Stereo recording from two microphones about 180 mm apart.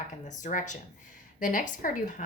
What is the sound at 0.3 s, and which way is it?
Speech, 45° left (ahead or behind).